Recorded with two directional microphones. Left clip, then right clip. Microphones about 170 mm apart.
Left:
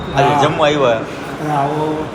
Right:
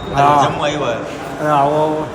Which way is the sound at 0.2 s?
10° right (ahead or behind).